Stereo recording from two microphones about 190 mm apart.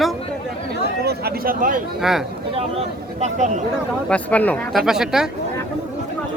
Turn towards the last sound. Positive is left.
turn(degrees=-5)  # may be behind; listen again after turning